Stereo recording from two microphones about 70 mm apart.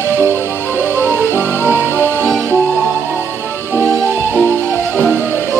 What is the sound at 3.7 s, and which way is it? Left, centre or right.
Music, centre.